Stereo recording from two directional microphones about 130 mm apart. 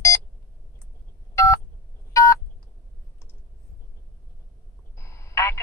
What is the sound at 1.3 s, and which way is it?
Telephone dialing, 20° left (ahead or behind).